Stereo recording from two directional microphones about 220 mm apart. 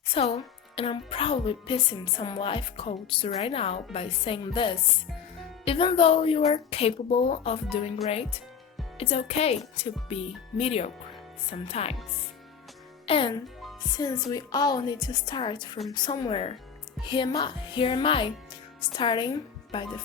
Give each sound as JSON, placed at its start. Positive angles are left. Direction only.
{"t": 0.1, "sound": "a woman's voice", "side_deg": 25}
{"t": 9.0, "sound": "a woman's voice", "side_deg": 30}
{"t": 13.1, "sound": "a woman's voice", "side_deg": 25}